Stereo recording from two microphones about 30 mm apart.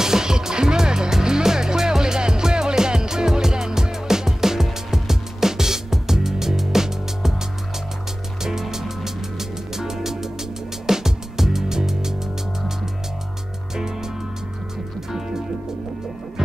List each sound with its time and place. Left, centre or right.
0.0 s music: centre
8.5 s music: centre
15.0 s music: centre